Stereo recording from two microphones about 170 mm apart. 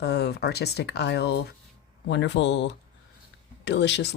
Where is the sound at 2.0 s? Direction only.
90° left.